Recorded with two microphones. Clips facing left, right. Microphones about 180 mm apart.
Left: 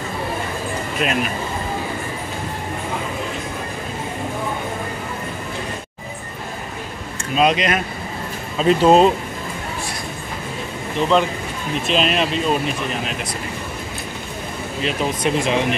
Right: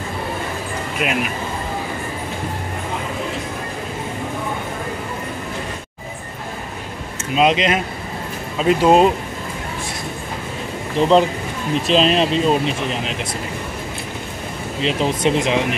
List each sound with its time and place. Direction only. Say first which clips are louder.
1.0 s speech: even; 10° right (ahead or behind)
7.3 s speech: right 1 dB; 20° right (ahead or behind)
8.5 s speech: even; 10° right (ahead or behind)
11.0 s speech: right 3 dB; 35° right (ahead or behind)
14.8 s speech: right 3 dB; 25° right (ahead or behind)